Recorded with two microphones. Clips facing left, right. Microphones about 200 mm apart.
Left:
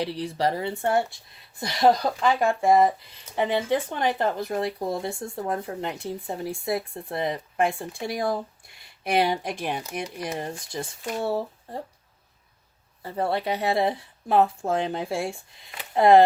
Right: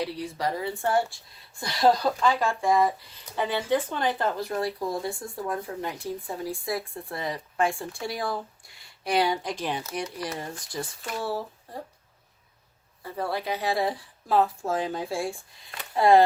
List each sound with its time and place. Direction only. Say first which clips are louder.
0.0 s speech: left 3 dB; 30° left (ahead or behind)
13.0 s speech: left 4 dB; 25° left (ahead or behind)